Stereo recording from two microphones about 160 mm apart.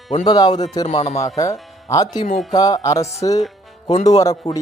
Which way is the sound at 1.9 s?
20° left (ahead or behind).